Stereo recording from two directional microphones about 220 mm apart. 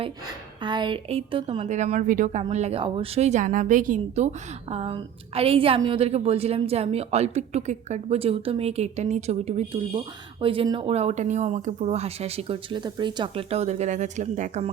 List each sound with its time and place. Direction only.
0.6 s speech: 20° right (ahead or behind)